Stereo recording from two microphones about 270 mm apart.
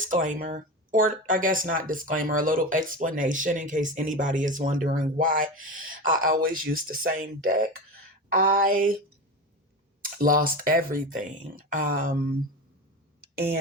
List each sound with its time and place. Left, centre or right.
0.0 s speech: right
10.0 s speech: right